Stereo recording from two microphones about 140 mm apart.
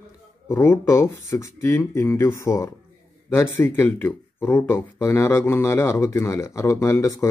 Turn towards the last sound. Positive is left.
turn(degrees=20)  # may be behind; listen again after turning